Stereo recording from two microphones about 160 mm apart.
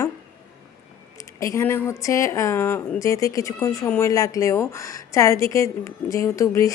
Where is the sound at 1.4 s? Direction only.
20° left (ahead or behind).